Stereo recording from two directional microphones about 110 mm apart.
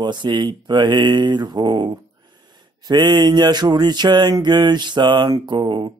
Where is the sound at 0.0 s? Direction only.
45° right (ahead or behind).